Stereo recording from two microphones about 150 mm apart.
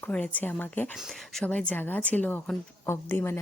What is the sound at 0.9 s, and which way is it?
Speech, centre (ahead or behind).